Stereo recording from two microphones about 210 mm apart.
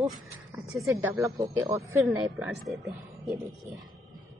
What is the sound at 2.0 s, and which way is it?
A woman's voice, centre (ahead or behind).